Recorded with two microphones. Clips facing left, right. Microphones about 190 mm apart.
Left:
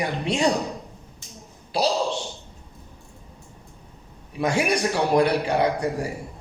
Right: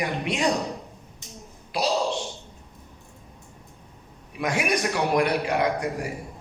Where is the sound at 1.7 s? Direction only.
30° left (ahead or behind).